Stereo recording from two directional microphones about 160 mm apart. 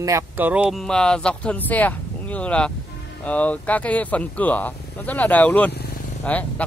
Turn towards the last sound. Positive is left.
turn(degrees=10)  # may be behind; listen again after turning